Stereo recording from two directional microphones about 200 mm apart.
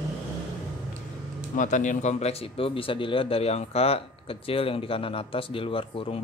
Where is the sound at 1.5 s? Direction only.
40° left (ahead or behind).